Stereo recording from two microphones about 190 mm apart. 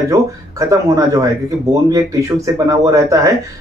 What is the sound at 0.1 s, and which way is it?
Speech, 15° right (ahead or behind).